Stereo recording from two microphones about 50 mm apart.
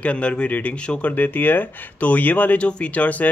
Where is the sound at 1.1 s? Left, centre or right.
Left.